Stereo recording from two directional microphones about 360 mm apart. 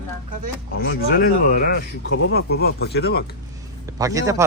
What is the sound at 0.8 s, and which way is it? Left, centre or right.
Speech, left.